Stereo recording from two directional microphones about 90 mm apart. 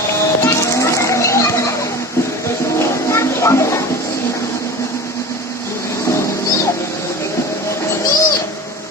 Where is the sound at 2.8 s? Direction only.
30° left (ahead or behind).